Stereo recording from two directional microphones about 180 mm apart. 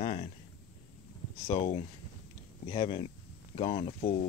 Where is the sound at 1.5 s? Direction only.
30° left (ahead or behind).